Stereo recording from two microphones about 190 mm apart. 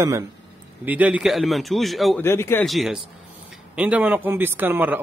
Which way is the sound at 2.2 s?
15° left (ahead or behind).